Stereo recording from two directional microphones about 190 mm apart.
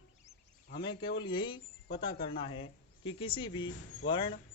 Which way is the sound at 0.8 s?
25° left (ahead or behind).